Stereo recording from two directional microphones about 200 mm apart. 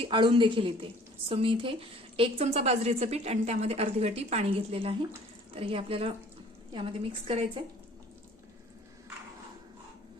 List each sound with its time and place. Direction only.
0.0 s a woman's voice: 25° right (ahead or behind)